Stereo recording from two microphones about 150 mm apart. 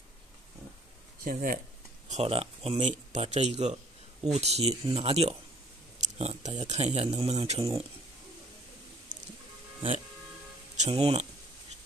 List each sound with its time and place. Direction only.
1.2 s speech: 65° right (ahead or behind)
2.0 s speech: 45° right (ahead or behind)
5.9 s a sound: 50° right (ahead or behind)
6.6 s speech: 45° right (ahead or behind)
9.8 s music: 40° right (ahead or behind)
10.8 s speech: 45° right (ahead or behind)